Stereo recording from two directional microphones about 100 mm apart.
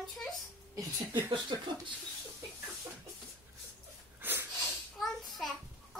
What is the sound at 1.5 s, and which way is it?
Speech, 50° right (ahead or behind).